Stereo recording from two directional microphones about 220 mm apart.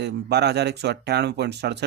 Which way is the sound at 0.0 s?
50° right (ahead or behind).